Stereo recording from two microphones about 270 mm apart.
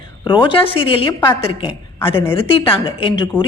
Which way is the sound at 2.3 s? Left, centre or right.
Centre.